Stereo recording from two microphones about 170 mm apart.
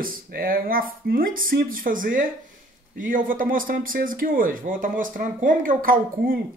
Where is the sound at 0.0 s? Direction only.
60° right (ahead or behind).